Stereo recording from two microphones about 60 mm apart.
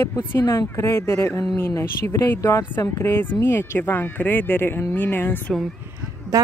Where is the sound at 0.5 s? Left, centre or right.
Left.